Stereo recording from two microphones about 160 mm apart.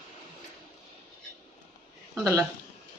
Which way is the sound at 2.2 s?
15° right (ahead or behind).